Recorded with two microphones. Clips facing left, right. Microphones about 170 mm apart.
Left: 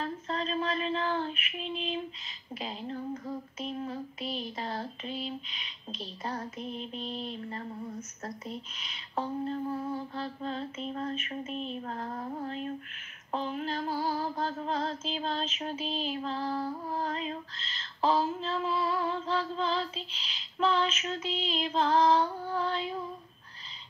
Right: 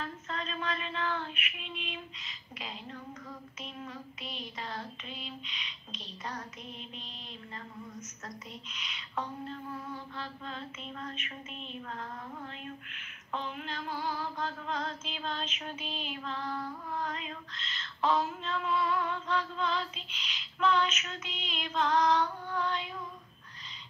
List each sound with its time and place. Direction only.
0.0 s music: 35° left (ahead or behind)
6.7 s mantra: 40° left (ahead or behind)
7.3 s music: 35° left (ahead or behind)